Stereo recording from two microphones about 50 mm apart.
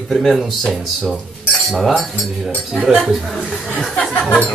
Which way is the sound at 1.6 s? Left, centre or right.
Centre.